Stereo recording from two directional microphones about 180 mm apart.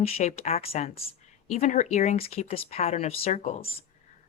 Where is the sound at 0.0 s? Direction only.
35° left (ahead or behind).